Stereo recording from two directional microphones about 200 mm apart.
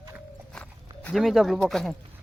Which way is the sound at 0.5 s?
5° left (ahead or behind).